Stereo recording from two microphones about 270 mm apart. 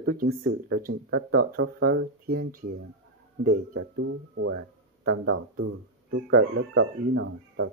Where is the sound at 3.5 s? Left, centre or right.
Right.